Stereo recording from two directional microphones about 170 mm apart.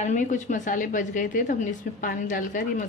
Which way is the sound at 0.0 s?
45° left (ahead or behind).